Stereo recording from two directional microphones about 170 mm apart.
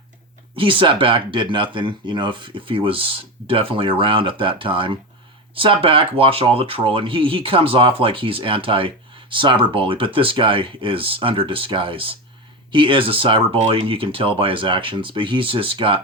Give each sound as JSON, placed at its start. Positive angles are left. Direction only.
{"t": 0.5, "sound": "speech", "side_deg": -30}